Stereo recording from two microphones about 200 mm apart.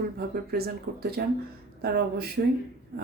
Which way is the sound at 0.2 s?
50° right (ahead or behind).